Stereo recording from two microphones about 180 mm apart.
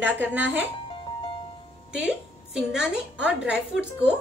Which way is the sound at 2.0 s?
5° right (ahead or behind).